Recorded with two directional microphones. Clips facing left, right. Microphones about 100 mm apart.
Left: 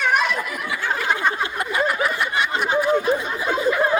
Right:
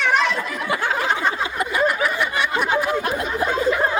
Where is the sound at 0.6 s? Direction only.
60° right (ahead or behind).